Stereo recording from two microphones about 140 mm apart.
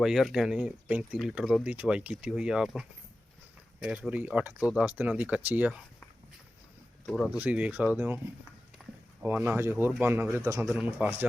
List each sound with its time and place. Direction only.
0.0 s speech: centre (ahead or behind)
7.0 s speech: 5° left (ahead or behind)
7.3 s speech: 10° right (ahead or behind)
8.8 s a sound: 5° right (ahead or behind)
9.2 s speech: 15° right (ahead or behind)